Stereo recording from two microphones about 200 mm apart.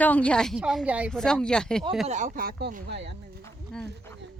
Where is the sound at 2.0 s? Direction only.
35° right (ahead or behind); by 3.1 s 60° right (ahead or behind).